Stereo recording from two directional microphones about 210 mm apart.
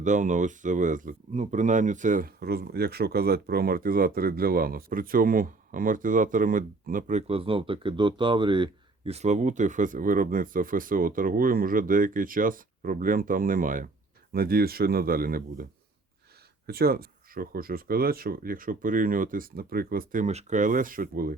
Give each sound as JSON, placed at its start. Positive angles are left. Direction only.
{"t": 0.0, "sound": "speech", "side_deg": -35}
{"t": 16.6, "sound": "speech", "side_deg": -45}